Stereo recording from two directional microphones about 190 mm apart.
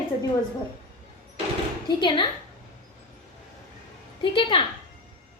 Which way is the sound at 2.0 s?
25° left (ahead or behind).